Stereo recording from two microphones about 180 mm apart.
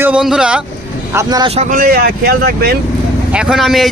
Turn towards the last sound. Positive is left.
turn(degrees=0)  # may be behind; listen again after turning